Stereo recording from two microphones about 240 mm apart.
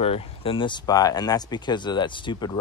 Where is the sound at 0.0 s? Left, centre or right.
Left.